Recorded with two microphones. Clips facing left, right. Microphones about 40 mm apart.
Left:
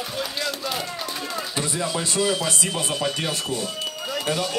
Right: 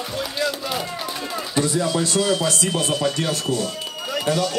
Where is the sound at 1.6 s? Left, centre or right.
Centre.